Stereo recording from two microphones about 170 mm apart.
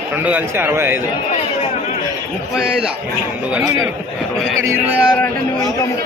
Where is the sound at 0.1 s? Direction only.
10° right (ahead or behind).